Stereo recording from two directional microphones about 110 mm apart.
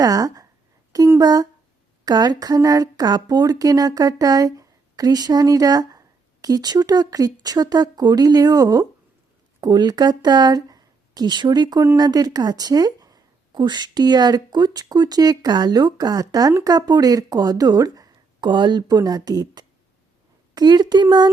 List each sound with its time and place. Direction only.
0.0 s a woman's voice: 35° right (ahead or behind)